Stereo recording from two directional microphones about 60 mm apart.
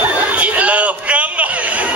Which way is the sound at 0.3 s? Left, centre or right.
Right.